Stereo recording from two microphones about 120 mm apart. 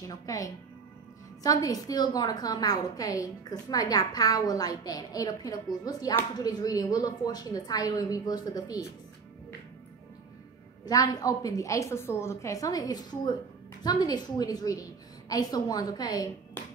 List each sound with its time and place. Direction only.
0.1 s a woman's voice: 30° left (ahead or behind)
10.9 s a woman's voice: 30° left (ahead or behind)